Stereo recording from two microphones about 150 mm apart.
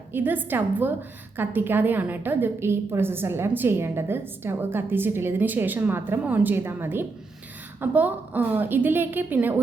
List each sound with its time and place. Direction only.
0.1 s a woman's voice: 10° right (ahead or behind)